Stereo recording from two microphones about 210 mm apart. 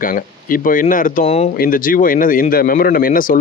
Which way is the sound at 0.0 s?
40° left (ahead or behind).